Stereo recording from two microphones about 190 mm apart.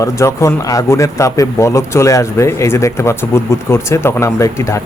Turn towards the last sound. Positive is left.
turn(degrees=15)  # may be behind; listen again after turning